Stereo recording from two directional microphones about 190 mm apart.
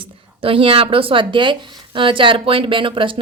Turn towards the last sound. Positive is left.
turn(degrees=-25)  # may be behind; listen again after turning